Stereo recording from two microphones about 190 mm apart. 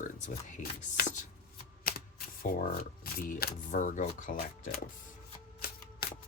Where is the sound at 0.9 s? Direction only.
45° left (ahead or behind).